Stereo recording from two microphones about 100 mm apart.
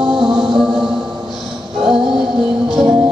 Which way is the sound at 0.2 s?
5° right (ahead or behind).